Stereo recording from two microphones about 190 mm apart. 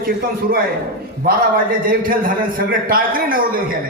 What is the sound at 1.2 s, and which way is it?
A man's voice, 50° right (ahead or behind).